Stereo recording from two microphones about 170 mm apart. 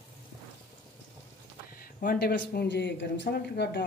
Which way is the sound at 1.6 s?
60° left (ahead or behind).